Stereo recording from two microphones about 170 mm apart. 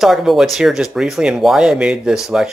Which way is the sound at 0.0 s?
Centre (ahead or behind).